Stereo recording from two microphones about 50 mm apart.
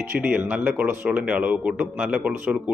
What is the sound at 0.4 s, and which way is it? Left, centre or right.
A man's voice, right.